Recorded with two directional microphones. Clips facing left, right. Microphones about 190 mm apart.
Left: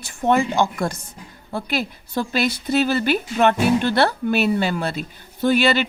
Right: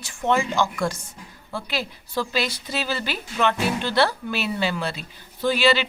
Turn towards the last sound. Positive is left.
turn(degrees=50)  # may be behind; listen again after turning